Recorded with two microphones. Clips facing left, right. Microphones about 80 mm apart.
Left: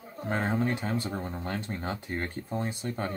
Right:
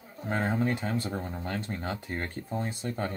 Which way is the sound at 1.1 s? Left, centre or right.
Centre.